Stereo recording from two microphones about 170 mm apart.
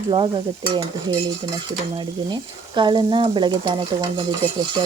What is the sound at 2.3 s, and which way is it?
Frying, 25° right (ahead or behind).